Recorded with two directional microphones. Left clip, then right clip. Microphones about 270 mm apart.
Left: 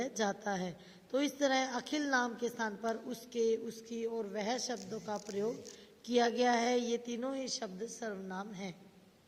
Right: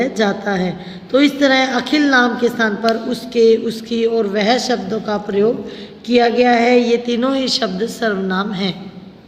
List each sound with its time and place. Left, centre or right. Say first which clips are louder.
0.0 s a woman's voice: right 18 dB; left